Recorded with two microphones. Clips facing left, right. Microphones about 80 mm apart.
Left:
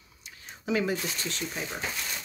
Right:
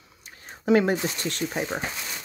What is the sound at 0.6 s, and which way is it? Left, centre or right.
Speech, right.